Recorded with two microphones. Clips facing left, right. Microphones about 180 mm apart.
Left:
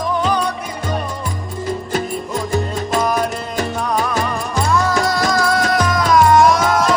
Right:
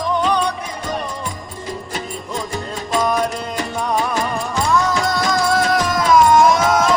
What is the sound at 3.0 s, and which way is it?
Music, 5° left (ahead or behind).